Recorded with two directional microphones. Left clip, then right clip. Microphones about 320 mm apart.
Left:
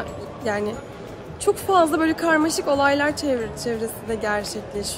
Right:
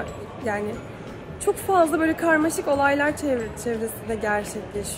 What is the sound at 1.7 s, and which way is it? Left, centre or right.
A woman's voice, centre.